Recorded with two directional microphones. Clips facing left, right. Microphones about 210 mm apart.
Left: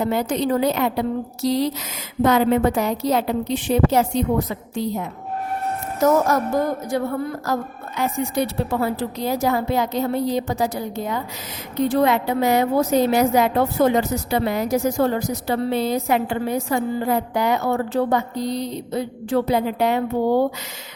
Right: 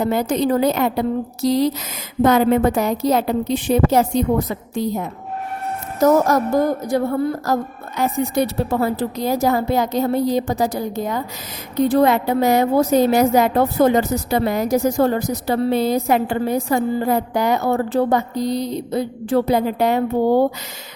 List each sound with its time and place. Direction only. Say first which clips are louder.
0.0 s a woman's voice: right 3 dB; 45° right (ahead or behind)
6.2 s a woman's voice: right 3 dB; 35° right (ahead or behind)